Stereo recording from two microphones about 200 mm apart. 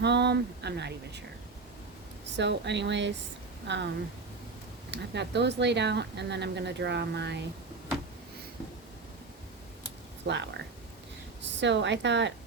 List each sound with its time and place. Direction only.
0.0 s speech: 55° right (ahead or behind)
2.3 s speech: 60° right (ahead or behind)
4.9 s speech: 60° right (ahead or behind)
10.2 s speech: 60° right (ahead or behind)